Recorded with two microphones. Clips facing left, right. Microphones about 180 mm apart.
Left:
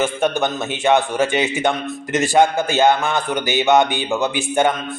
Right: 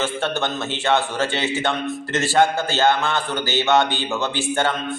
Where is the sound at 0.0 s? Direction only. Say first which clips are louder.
Left 4 dB; 15° left (ahead or behind).